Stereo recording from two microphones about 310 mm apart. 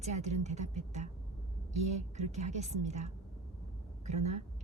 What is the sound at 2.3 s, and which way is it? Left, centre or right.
Speech, right.